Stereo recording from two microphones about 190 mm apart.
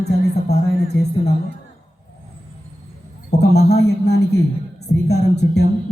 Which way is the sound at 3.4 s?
60° left (ahead or behind).